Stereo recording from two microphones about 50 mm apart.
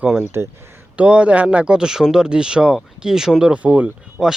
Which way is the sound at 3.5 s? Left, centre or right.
Right.